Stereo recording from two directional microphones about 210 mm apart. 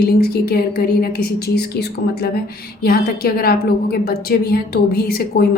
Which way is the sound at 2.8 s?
45° left (ahead or behind).